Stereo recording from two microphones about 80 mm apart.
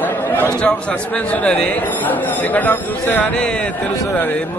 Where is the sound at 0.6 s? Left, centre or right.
Centre.